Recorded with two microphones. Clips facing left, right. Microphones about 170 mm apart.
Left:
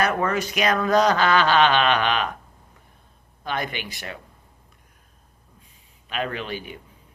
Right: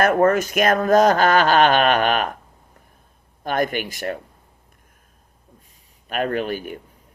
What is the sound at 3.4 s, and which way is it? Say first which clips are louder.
Speech: right 7 dB; 45° right (ahead or behind).